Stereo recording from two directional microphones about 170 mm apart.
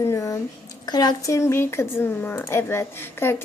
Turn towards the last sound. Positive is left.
turn(degrees=15)  # may be behind; listen again after turning